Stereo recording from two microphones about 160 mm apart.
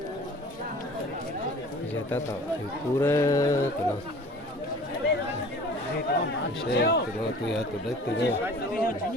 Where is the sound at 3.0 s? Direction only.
15° left (ahead or behind).